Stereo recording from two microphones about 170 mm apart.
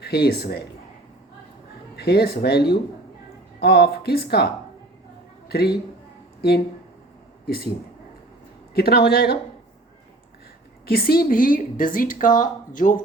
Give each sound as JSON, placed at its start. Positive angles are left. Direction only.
{"t": 0.0, "sound": "speech", "side_deg": 70}
{"t": 2.0, "sound": "a man's voice", "side_deg": 70}
{"t": 7.4, "sound": "speech", "side_deg": 65}
{"t": 8.7, "sound": "speech", "side_deg": 65}
{"t": 10.8, "sound": "speech", "side_deg": 65}